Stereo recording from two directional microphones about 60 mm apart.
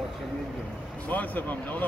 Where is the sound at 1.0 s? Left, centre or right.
Left.